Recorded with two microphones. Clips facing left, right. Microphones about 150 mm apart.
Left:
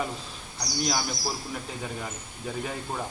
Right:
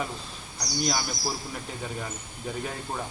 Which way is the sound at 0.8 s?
Centre (ahead or behind).